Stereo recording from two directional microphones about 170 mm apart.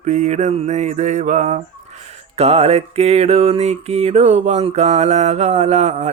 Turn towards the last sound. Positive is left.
turn(degrees=-40)  # may be behind; listen again after turning